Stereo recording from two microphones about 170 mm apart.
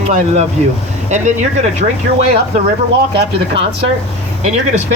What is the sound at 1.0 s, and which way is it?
Speech, 45° right (ahead or behind).